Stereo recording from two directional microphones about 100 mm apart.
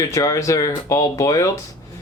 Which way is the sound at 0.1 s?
30° left (ahead or behind).